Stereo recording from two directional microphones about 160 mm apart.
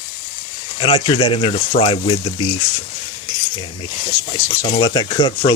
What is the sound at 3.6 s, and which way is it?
Speech, 35° left (ahead or behind).